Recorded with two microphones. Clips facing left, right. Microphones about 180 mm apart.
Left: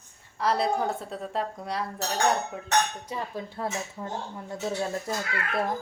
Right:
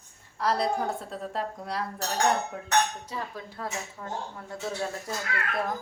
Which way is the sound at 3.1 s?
25° left (ahead or behind).